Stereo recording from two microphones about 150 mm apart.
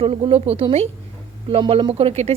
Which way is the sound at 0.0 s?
40° right (ahead or behind).